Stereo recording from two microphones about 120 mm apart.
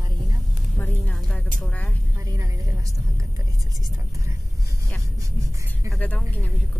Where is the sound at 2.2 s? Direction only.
25° right (ahead or behind).